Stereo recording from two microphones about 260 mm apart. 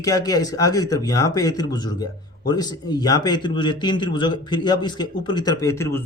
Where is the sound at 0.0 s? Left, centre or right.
Centre.